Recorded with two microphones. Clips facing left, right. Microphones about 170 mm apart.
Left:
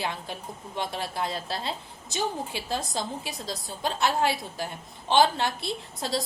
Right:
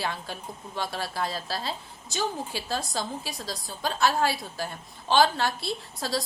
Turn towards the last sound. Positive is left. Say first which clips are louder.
# even
turn(degrees=20)  # may be behind; listen again after turning